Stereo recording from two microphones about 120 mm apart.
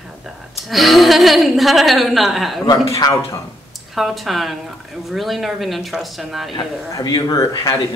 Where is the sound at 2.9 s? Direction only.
30° left (ahead or behind).